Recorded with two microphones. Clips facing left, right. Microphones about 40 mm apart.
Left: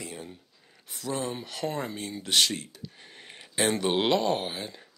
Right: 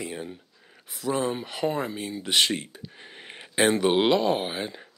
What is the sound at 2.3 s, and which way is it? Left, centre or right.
Speech, right.